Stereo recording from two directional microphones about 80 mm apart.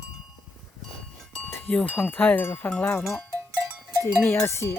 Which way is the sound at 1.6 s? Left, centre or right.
Centre.